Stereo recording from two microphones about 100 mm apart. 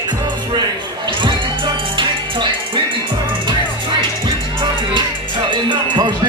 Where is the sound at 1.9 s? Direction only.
50° right (ahead or behind).